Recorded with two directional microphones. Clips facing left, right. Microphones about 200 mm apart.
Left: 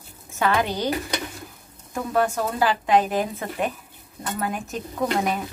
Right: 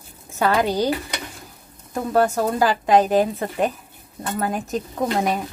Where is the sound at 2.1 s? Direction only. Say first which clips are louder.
Right 4 dB; 40° right (ahead or behind).